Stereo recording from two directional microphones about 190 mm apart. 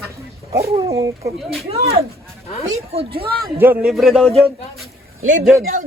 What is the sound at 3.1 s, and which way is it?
Speech, 55° right (ahead or behind).